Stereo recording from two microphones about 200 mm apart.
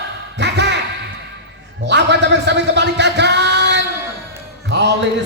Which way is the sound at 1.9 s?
60° right (ahead or behind).